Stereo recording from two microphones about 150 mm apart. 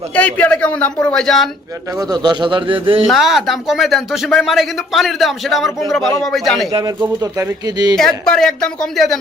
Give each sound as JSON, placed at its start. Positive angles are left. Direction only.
{"t": 0.1, "sound": "a man's voice", "side_deg": 10}
{"t": 2.0, "sound": "speech", "side_deg": -25}
{"t": 3.1, "sound": "speech", "side_deg": 0}
{"t": 6.7, "sound": "speech", "side_deg": -30}
{"t": 7.9, "sound": "speech", "side_deg": 5}